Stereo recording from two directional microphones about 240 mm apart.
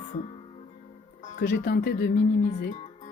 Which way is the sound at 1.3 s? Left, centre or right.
Left.